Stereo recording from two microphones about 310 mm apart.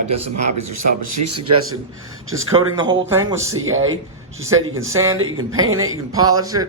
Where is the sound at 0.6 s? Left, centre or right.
Right.